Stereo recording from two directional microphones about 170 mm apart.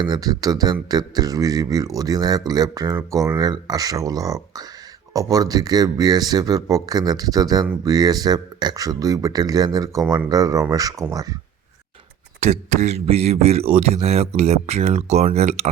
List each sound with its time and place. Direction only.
0.0 s speech: 25° right (ahead or behind)
12.4 s speech: 40° right (ahead or behind)